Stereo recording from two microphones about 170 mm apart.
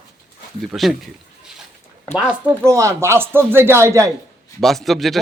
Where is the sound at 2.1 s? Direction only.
15° right (ahead or behind).